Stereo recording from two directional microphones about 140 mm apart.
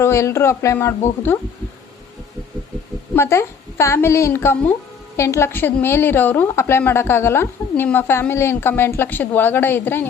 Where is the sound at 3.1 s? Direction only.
20° left (ahead or behind).